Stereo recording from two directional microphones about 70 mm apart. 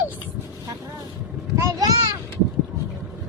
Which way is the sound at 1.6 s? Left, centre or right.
Right.